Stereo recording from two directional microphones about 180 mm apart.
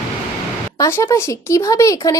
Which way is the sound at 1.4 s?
15° left (ahead or behind).